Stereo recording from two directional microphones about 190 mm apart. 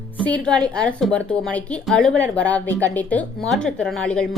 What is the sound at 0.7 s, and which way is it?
A woman's voice, 5° left (ahead or behind).